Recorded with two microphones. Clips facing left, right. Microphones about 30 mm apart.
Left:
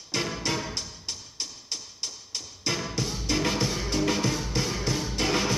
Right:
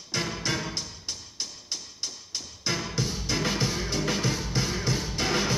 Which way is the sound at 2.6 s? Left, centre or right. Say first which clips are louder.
Even; centre.